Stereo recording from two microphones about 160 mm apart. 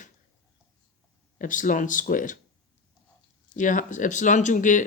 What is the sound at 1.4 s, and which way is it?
Speech, 55° left (ahead or behind).